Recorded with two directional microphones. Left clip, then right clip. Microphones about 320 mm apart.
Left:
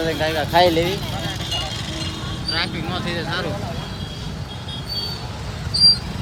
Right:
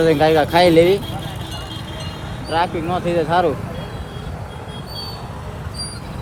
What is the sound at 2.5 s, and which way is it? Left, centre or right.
Speech, centre.